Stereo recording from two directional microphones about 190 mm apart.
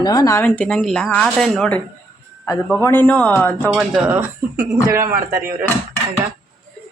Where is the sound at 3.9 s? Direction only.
10° right (ahead or behind).